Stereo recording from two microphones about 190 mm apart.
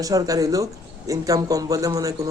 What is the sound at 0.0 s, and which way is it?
A man's voice, 20° right (ahead or behind).